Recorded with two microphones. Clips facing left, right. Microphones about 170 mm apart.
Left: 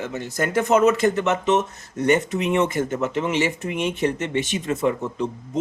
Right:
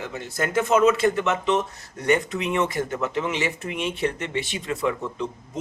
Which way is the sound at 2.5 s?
20° left (ahead or behind).